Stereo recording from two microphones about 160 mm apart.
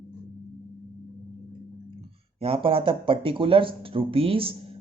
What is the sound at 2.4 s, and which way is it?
Speech, 35° right (ahead or behind).